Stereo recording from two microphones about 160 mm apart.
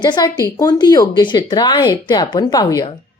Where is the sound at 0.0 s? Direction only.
25° left (ahead or behind).